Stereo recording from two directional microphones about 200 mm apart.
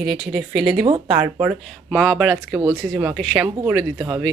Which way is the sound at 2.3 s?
15° right (ahead or behind).